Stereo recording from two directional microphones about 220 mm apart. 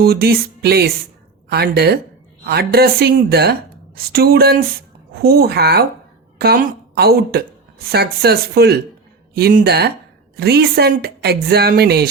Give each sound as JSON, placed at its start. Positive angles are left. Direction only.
{"t": 0.0, "sound": "a woman's voice", "side_deg": -45}